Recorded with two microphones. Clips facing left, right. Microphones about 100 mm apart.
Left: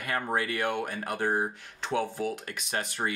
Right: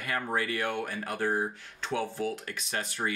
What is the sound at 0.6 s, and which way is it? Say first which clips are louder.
Speech: left 2 dB; 15° left (ahead or behind).